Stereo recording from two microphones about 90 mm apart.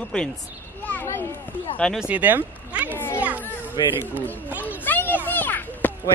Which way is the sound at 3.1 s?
15° right (ahead or behind).